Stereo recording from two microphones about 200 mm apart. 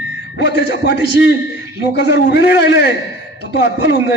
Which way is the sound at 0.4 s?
55° left (ahead or behind).